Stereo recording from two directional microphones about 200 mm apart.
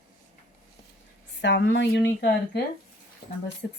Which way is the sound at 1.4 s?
65° left (ahead or behind).